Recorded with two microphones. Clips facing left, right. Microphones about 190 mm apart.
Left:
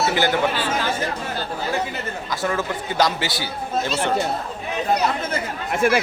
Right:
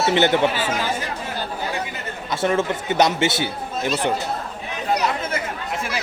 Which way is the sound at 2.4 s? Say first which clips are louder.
Right 4 dB; 25° right (ahead or behind).